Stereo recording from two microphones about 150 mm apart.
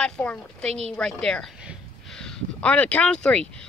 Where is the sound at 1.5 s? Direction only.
5° right (ahead or behind).